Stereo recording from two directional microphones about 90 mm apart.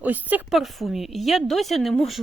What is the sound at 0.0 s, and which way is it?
Speech, 20° right (ahead or behind).